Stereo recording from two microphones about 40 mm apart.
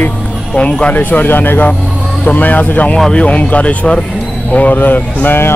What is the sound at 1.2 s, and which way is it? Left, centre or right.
Speech, left.